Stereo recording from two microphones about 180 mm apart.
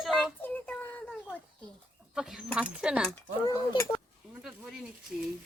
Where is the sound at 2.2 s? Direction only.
5° right (ahead or behind).